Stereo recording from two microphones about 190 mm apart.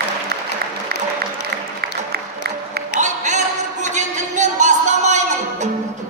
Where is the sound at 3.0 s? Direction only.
40° right (ahead or behind).